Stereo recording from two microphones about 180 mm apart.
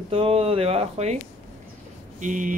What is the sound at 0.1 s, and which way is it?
Speech, 30° right (ahead or behind).